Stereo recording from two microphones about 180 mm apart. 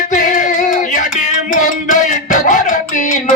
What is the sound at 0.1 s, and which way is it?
Music, 45° left (ahead or behind).